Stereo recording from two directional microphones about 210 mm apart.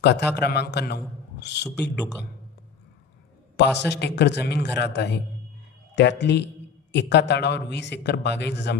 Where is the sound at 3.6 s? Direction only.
55° left (ahead or behind).